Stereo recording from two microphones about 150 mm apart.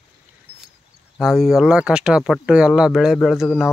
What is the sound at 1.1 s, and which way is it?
Speech, centre (ahead or behind).